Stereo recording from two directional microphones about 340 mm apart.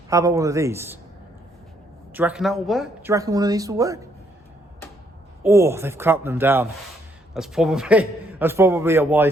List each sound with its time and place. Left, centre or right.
0.1 s speech: centre
2.1 s speech: centre
5.4 s a man's voice: centre